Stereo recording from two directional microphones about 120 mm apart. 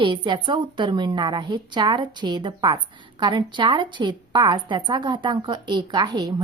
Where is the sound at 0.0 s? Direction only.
40° right (ahead or behind).